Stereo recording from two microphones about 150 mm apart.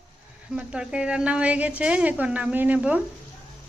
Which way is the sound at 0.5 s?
5° right (ahead or behind).